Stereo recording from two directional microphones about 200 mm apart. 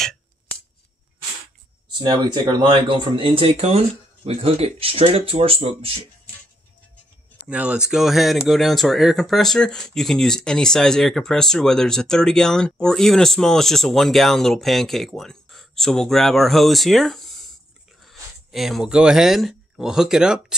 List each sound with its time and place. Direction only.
2.0 s speech: 25° right (ahead or behind)
7.4 s speech: 5° right (ahead or behind)